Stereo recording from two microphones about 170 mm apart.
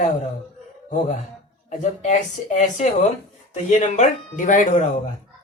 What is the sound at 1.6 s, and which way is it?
Speech, 45° left (ahead or behind).